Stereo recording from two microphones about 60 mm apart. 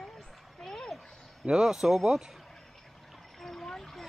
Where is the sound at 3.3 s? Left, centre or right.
Centre.